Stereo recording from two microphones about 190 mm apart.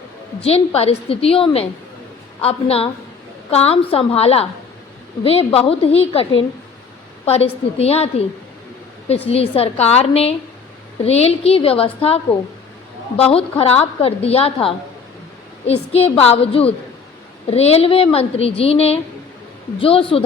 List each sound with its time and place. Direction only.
0.4 s a woman's voice: 30° left (ahead or behind)
7.3 s a woman's voice: 35° left (ahead or behind)